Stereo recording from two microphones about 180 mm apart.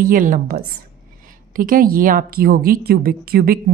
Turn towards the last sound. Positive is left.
turn(degrees=-55)  # may be behind; listen again after turning